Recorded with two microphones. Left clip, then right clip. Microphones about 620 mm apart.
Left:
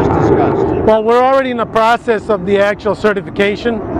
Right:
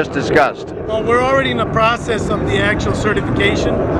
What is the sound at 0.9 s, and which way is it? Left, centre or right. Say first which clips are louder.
Speech: even; left.